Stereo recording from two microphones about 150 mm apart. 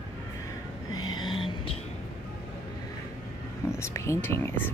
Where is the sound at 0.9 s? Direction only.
30° left (ahead or behind).